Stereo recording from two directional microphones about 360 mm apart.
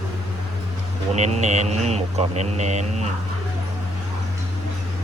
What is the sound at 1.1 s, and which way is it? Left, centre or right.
Speech, centre.